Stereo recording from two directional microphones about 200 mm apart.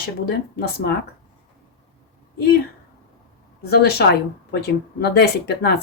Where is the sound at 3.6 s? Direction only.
50° left (ahead or behind).